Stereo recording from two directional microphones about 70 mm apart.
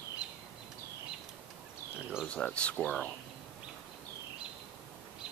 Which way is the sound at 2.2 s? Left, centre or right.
Centre.